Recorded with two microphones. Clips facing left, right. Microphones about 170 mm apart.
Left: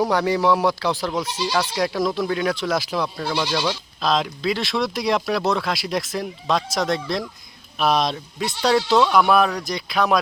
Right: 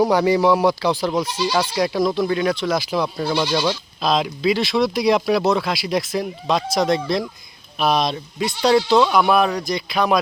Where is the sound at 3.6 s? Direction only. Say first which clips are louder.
Right 2 dB; 5° right (ahead or behind).